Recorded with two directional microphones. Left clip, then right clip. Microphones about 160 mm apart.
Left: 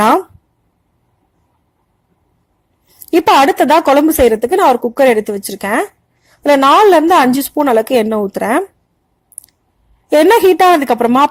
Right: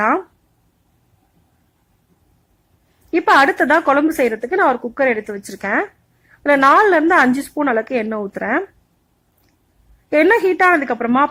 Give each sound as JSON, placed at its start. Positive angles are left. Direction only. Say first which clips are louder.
{"t": 3.1, "sound": "a woman's voice", "louder": "left 4 dB", "side_deg": 25}
{"t": 10.2, "sound": "a woman's voice", "louder": "left 6 dB", "side_deg": 30}